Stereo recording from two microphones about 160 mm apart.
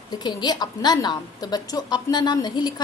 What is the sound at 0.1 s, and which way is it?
A woman's voice, 25° left (ahead or behind).